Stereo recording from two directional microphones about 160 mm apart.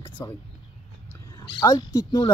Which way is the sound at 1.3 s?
20° left (ahead or behind).